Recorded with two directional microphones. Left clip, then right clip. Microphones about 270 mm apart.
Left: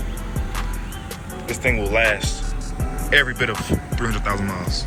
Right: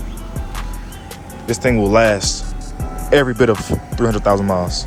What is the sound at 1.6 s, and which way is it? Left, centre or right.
Speech, right.